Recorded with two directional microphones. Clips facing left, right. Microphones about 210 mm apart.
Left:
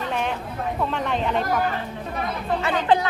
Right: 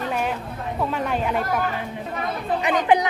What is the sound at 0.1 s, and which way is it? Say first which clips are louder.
Chatter: right 1 dB; 5° right (ahead or behind).